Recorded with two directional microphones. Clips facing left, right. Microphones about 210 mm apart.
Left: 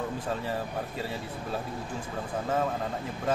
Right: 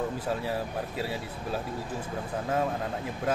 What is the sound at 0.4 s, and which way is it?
Speech, 10° right (ahead or behind).